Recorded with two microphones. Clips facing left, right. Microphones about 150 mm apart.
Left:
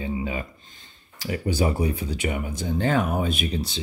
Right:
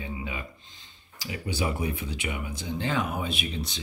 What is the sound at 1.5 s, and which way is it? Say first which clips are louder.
Speech: left 5 dB; 45° left (ahead or behind).